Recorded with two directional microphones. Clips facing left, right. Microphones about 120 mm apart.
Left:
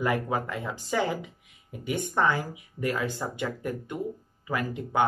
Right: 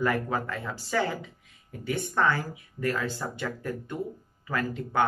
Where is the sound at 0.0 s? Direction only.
15° left (ahead or behind).